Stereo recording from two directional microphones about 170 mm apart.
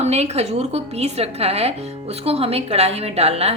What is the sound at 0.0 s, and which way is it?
A woman's voice, 40° right (ahead or behind).